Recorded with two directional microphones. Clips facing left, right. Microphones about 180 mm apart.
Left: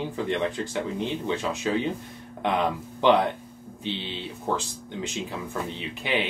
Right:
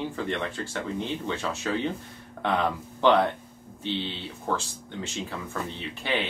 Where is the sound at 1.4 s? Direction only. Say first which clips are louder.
Left 2 dB; 15° left (ahead or behind).